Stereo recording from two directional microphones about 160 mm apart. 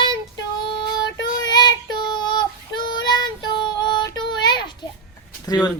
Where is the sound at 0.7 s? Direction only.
30° left (ahead or behind).